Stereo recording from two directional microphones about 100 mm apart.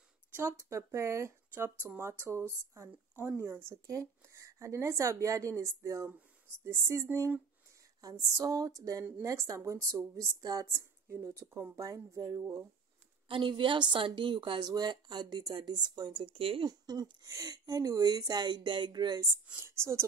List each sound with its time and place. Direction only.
0.4 s speech: 30° right (ahead or behind)
10.4 s speech: 40° right (ahead or behind)
13.3 s a woman's voice: 55° right (ahead or behind)
16.6 s speech: 40° right (ahead or behind)
19.6 s speech: 25° right (ahead or behind)